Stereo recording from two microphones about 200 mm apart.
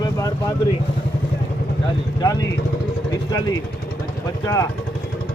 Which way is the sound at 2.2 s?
20° left (ahead or behind).